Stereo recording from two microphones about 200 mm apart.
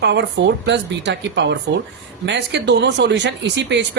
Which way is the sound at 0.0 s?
60° right (ahead or behind).